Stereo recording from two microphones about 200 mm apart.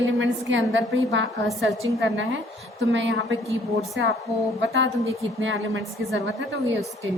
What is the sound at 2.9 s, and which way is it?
A woman's voice, 70° right (ahead or behind).